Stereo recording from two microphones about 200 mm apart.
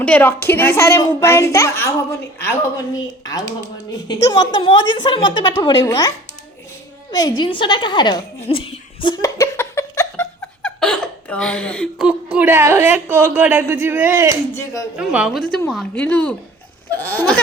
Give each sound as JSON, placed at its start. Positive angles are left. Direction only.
{"t": 0.0, "sound": "a child's voice", "side_deg": 10}
{"t": 7.1, "sound": "a sound", "side_deg": 20}
{"t": 12.0, "sound": "a woman's voice", "side_deg": -5}
{"t": 14.5, "sound": "a child's voice", "side_deg": 15}
{"t": 14.9, "sound": "a woman's voice", "side_deg": -5}